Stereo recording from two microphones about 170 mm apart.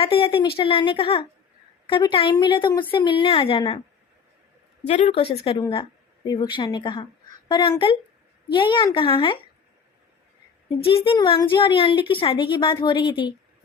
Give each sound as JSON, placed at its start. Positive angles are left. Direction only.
{"t": 0.0, "sound": "a woman's voice", "side_deg": 35}
{"t": 4.9, "sound": "a woman's voice", "side_deg": 35}
{"t": 10.8, "sound": "a woman's voice", "side_deg": 30}